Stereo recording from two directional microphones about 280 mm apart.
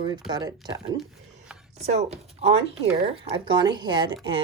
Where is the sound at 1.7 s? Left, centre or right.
Right.